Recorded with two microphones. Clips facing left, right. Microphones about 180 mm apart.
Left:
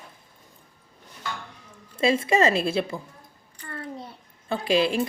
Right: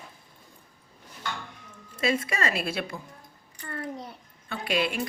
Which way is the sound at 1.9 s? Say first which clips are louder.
Left 6 dB; 25° left (ahead or behind).